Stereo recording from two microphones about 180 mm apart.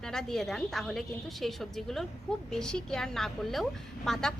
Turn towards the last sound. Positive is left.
turn(degrees=0)  # may be behind; listen again after turning